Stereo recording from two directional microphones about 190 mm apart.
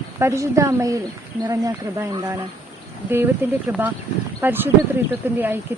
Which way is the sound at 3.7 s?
10° right (ahead or behind).